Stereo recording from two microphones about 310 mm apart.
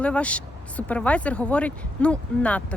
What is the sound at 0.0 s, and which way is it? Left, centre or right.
Speech, centre.